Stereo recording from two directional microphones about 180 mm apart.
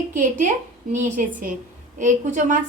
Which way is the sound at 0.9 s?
45° right (ahead or behind).